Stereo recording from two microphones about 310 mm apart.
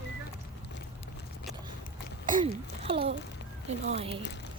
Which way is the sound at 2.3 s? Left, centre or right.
Centre.